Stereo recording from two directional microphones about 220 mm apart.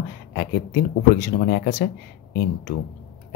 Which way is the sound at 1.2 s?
45° left (ahead or behind).